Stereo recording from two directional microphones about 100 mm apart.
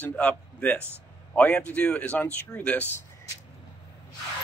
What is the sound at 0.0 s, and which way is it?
Speech, 15° left (ahead or behind).